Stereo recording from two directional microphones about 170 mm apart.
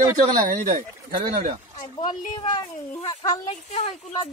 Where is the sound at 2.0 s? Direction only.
25° left (ahead or behind).